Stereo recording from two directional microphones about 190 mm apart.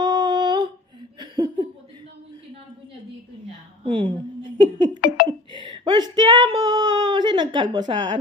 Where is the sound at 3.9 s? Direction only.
25° right (ahead or behind).